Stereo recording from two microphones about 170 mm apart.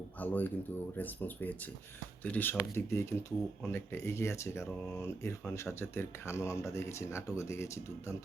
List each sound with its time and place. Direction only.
0.2 s speech: 10° left (ahead or behind)